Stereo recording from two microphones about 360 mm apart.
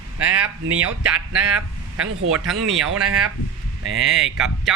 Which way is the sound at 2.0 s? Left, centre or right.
Right.